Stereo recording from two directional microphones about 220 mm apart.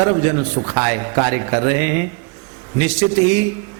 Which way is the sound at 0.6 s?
15° right (ahead or behind).